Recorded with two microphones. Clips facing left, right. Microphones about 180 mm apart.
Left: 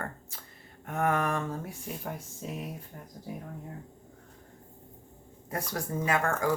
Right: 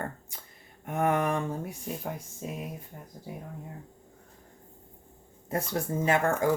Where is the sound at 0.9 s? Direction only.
20° right (ahead or behind).